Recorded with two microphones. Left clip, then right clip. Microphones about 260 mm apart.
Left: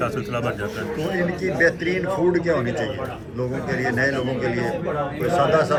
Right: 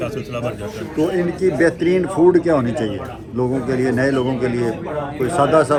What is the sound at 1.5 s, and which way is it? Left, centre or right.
Speech, right.